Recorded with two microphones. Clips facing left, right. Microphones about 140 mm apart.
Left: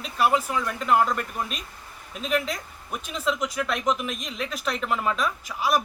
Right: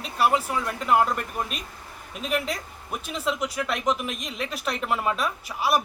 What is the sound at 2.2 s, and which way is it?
Speech, 5° right (ahead or behind).